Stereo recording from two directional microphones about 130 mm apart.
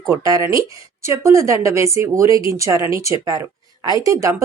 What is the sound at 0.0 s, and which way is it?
Speech, 25° right (ahead or behind).